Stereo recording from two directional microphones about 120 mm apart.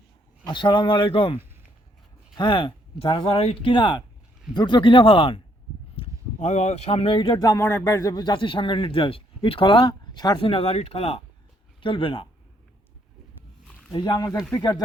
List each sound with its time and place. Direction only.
0.4 s speech: 40° left (ahead or behind)
6.4 s speech: 75° left (ahead or behind); by 10.5 s 35° left (ahead or behind)
10.5 s speech: 60° left (ahead or behind)
11.8 s speech: 45° left (ahead or behind)
13.9 s speech: 35° left (ahead or behind)